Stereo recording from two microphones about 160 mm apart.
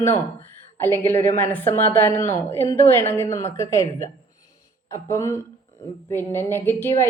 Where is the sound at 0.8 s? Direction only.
15° left (ahead or behind).